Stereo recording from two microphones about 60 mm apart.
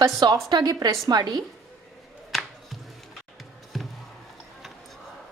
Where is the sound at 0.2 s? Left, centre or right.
Right.